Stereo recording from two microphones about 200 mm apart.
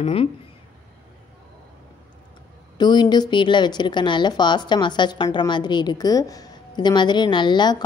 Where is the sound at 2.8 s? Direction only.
20° left (ahead or behind).